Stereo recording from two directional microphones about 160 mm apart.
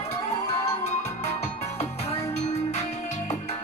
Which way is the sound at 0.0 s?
40° left (ahead or behind).